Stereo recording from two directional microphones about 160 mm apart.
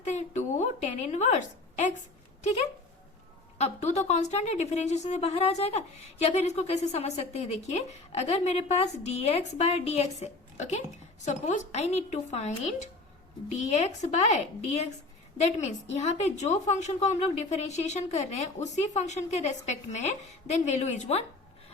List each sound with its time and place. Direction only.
0.0 s a woman's voice: 45° left (ahead or behind)
3.6 s a woman's voice: 45° left (ahead or behind)
15.4 s a woman's voice: 45° left (ahead or behind)